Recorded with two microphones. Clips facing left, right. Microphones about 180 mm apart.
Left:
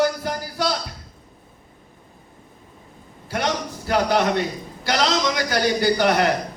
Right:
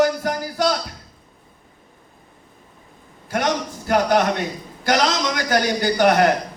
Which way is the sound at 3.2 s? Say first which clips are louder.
Right 2 dB; 50° right (ahead or behind).